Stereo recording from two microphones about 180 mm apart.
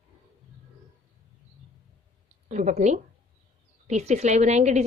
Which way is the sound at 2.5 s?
40° right (ahead or behind).